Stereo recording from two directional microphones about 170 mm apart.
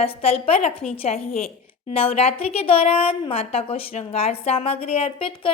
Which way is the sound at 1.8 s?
35° left (ahead or behind).